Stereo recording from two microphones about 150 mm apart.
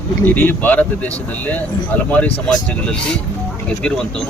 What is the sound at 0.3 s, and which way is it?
Speech, 10° left (ahead or behind).